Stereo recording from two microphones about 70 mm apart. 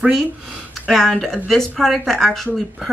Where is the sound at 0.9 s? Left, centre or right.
Centre.